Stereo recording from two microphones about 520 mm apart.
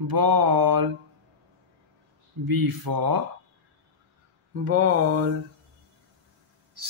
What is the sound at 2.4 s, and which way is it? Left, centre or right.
Speech, right.